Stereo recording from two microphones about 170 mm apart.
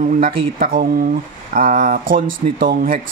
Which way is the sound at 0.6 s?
55° right (ahead or behind).